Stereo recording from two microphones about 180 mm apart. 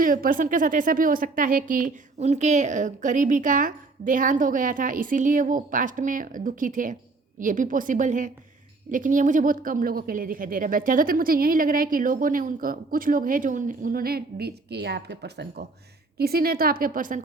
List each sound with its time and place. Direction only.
0.0 s a woman's voice: 50° right (ahead or behind)